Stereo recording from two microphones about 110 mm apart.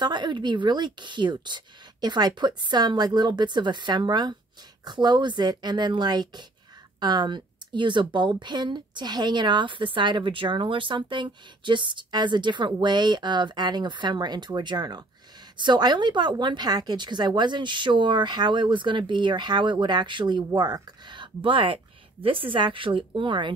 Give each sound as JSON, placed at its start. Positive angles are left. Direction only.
{"t": 0.0, "sound": "a woman's voice", "side_deg": -40}